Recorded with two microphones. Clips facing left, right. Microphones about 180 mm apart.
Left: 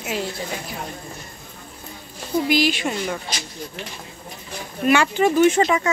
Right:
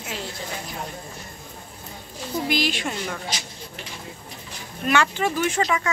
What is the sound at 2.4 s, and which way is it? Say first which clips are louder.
Speech: left 4 dB; 5° left (ahead or behind).